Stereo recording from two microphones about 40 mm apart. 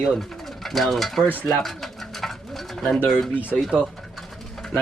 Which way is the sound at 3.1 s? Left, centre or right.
Centre.